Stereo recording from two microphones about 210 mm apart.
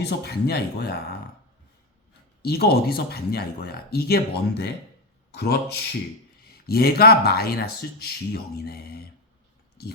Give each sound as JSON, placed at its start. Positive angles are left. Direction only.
{"t": 0.0, "sound": "speech", "side_deg": 50}
{"t": 2.4, "sound": "speech", "side_deg": 50}